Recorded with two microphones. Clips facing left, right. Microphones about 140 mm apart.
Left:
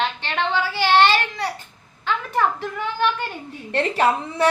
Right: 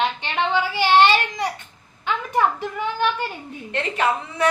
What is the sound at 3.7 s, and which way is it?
Speech, 35° left (ahead or behind).